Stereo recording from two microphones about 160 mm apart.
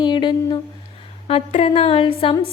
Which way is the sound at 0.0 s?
30° left (ahead or behind).